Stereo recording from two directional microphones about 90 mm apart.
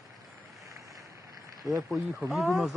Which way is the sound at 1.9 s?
Centre (ahead or behind).